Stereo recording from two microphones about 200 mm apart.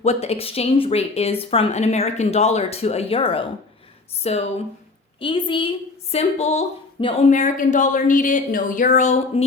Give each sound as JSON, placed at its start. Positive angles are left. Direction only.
{"t": 0.0, "sound": "a woman's voice", "side_deg": 30}